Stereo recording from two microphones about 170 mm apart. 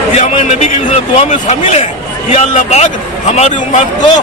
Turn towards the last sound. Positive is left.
turn(degrees=45)  # may be behind; listen again after turning